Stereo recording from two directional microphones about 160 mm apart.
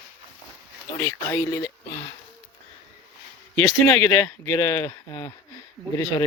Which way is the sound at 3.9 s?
15° left (ahead or behind).